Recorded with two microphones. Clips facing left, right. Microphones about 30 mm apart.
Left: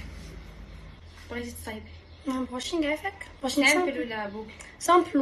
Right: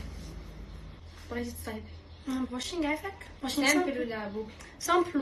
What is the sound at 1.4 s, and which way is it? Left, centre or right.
Speech, left.